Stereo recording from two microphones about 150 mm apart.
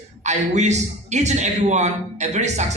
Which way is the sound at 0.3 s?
50° right (ahead or behind).